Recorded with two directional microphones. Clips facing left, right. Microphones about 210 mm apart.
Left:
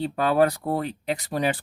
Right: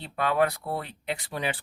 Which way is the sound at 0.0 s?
35° left (ahead or behind).